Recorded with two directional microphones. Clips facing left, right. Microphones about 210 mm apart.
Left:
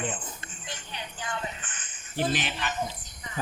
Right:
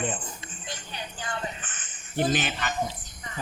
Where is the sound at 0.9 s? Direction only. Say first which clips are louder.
Even; 35° right (ahead or behind).